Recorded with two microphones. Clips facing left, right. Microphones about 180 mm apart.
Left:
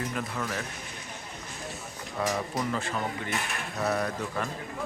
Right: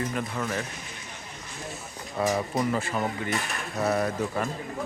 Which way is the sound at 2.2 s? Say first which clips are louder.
Right 4 dB; 5° right (ahead or behind).